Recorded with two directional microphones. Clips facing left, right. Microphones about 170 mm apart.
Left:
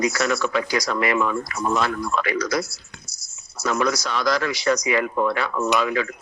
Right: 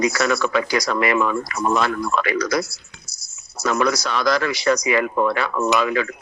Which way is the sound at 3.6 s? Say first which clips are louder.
Right 2 dB; 70° right (ahead or behind).